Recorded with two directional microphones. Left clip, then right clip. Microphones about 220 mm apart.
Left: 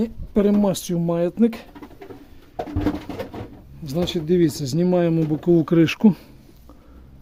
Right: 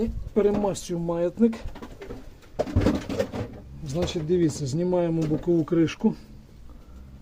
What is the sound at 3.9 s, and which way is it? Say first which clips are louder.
Speech: left 4 dB; 40° left (ahead or behind).